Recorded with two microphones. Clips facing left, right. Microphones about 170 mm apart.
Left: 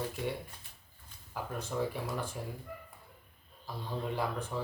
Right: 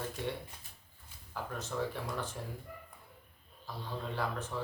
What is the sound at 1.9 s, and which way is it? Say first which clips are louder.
Speech: left 2 dB; 10° left (ahead or behind).